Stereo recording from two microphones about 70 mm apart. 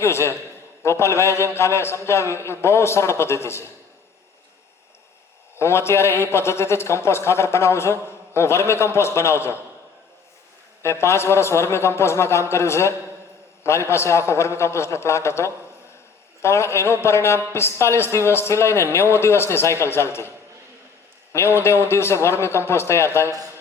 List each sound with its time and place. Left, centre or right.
0.0 s a woman's voice: left
5.5 s a woman's voice: left
10.8 s a woman's voice: left
21.3 s a woman's voice: left